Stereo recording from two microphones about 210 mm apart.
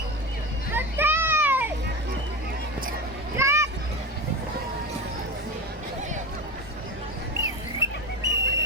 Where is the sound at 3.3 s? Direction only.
15° right (ahead or behind).